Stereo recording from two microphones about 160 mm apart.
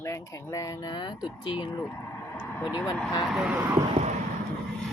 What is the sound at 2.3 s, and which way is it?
Vehicle, 10° left (ahead or behind).